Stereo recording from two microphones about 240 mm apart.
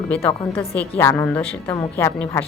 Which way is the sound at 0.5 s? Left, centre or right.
Left.